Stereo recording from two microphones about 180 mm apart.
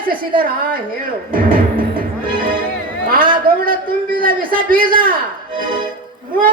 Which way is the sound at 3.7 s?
55° right (ahead or behind).